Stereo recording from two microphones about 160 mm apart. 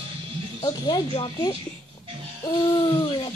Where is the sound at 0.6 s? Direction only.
25° left (ahead or behind).